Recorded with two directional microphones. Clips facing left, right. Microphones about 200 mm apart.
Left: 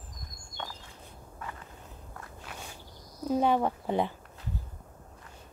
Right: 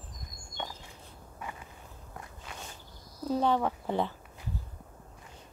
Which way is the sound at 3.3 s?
15° left (ahead or behind).